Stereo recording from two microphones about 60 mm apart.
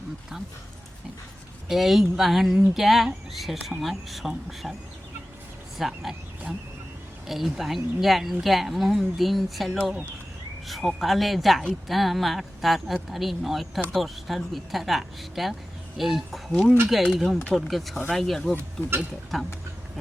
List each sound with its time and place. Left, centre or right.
1.6 s speech: centre
5.7 s speech: centre
7.3 s speech: centre
16.5 s speech: centre